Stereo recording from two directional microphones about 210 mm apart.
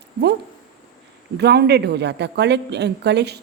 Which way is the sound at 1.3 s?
50° right (ahead or behind).